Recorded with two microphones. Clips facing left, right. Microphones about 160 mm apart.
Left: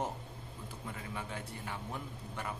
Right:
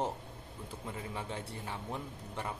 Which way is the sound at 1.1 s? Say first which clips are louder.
Right 2 dB; 30° right (ahead or behind).